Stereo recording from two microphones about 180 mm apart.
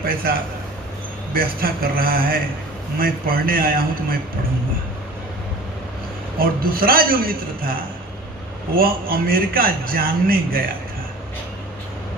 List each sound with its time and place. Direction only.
0.0 s a man's voice: 55° right (ahead or behind)
6.6 s a man's voice: 55° right (ahead or behind)